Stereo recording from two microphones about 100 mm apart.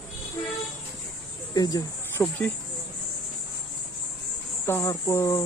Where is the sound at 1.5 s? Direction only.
40° left (ahead or behind).